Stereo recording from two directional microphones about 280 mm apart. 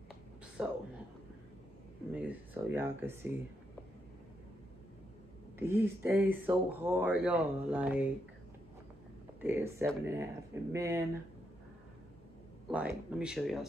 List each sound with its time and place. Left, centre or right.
0.6 s speech: centre
2.1 s speech: centre
5.6 s speech: centre
9.4 s speech: centre
12.6 s speech: centre